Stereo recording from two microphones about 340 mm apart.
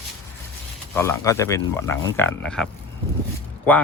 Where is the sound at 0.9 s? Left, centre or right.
Centre.